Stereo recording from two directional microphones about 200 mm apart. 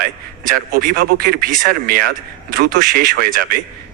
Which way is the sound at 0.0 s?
45° right (ahead or behind).